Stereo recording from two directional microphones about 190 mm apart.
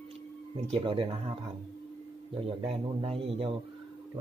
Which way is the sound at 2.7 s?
30° right (ahead or behind).